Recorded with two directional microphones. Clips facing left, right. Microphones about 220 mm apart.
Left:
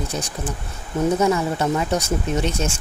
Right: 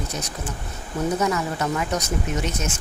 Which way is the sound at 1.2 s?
30° left (ahead or behind).